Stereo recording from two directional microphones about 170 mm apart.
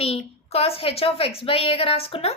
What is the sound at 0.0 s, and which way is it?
A woman's voice, 35° left (ahead or behind).